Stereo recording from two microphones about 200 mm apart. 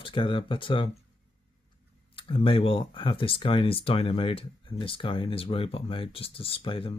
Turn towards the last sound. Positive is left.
turn(degrees=25)  # may be behind; listen again after turning